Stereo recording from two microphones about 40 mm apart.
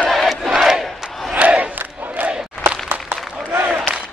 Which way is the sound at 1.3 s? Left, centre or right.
Right.